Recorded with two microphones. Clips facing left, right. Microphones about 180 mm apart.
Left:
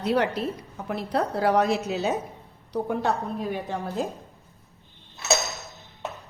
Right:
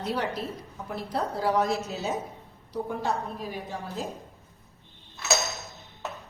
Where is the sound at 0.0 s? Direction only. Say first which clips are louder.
Left 6 dB; 65° left (ahead or behind).